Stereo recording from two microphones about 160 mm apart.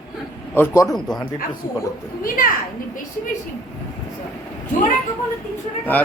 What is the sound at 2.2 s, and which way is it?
Speech, 60° left (ahead or behind).